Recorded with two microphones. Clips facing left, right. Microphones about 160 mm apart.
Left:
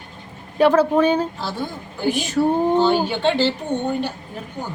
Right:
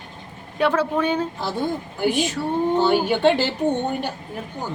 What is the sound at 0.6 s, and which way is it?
Speech, 40° left (ahead or behind).